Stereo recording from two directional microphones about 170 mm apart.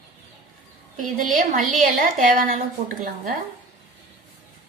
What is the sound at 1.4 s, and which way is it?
A woman's voice, 50° right (ahead or behind).